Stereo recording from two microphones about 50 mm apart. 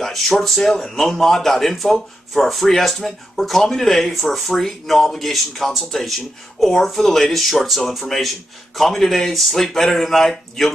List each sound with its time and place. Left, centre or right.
0.0 s speech: centre